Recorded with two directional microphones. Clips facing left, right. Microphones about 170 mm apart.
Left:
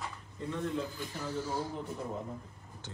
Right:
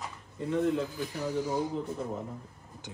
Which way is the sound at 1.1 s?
15° right (ahead or behind).